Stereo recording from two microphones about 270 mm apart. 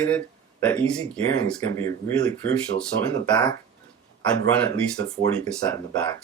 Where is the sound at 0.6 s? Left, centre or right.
Centre.